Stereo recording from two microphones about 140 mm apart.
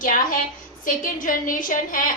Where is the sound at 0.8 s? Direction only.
80° left.